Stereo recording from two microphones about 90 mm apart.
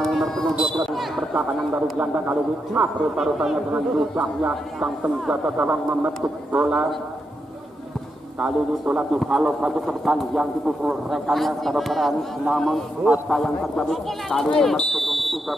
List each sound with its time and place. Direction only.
0.0 s a sound: 5° left (ahead or behind)
2.0 s a man's voice: 20° right (ahead or behind)
3.2 s a man's voice: 5° right (ahead or behind)
8.4 s a man's voice: 10° right (ahead or behind)